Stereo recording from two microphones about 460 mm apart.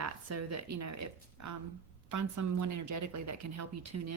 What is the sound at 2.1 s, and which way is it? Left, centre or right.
A woman's voice, right.